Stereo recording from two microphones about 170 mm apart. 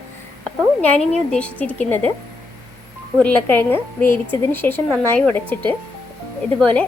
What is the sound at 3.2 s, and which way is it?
A woman's voice, 10° left (ahead or behind).